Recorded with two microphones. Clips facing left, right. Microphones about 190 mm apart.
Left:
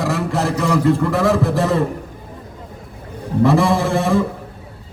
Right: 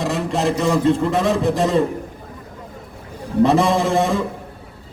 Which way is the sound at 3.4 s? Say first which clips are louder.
Even; 20° right (ahead or behind).